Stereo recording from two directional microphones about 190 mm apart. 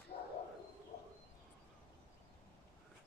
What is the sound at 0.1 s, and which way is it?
Bird, 35° left (ahead or behind).